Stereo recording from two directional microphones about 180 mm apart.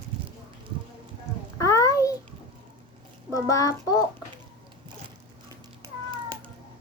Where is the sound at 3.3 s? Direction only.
20° left (ahead or behind).